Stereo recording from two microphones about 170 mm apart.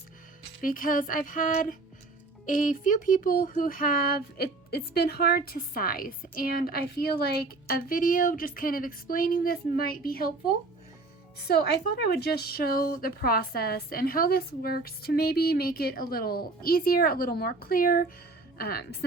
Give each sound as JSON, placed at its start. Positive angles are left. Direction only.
{"t": 0.6, "sound": "music", "side_deg": 55}
{"t": 2.5, "sound": "speech", "side_deg": 50}
{"t": 11.4, "sound": "speech", "side_deg": 70}